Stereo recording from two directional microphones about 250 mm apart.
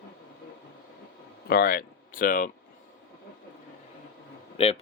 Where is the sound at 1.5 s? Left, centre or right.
Left.